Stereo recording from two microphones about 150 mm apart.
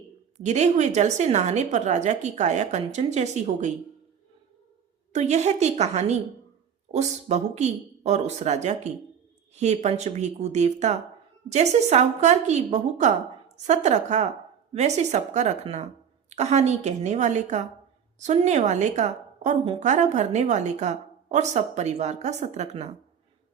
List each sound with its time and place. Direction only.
0.3 s a woman's voice: 50° right (ahead or behind)
5.1 s a woman's voice: 50° right (ahead or behind)